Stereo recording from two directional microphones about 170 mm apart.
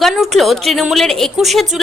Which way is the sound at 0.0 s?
Centre (ahead or behind).